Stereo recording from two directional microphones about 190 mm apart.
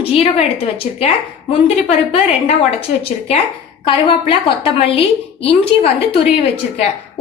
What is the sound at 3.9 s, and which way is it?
A woman's voice, 25° left (ahead or behind).